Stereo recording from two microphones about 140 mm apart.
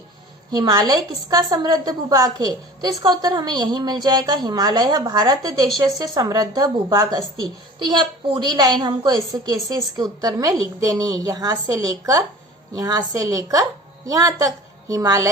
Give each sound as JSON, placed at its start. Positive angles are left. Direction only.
{"t": 0.5, "sound": "a woman's voice", "side_deg": -30}